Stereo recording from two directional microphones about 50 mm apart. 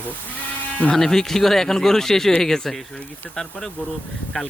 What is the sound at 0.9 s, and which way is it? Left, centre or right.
Speech, centre.